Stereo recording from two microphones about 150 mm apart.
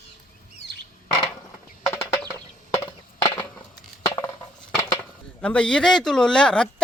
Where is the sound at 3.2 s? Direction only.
25° left (ahead or behind).